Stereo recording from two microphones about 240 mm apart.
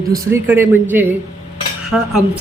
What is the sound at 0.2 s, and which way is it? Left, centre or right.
Speech, centre.